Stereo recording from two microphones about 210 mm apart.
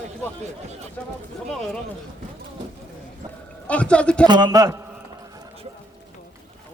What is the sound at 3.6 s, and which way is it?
Speech, 5° left (ahead or behind).